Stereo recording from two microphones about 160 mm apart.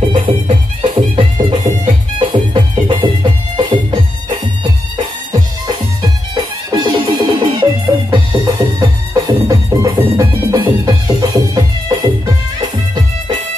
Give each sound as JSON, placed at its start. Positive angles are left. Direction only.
{"t": 0.1, "sound": "music", "side_deg": -35}